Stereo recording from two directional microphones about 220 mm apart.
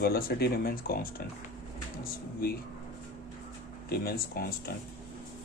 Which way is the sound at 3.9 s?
45° left (ahead or behind).